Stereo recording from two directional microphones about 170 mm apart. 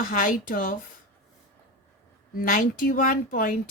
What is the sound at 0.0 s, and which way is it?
Speech, 55° left (ahead or behind).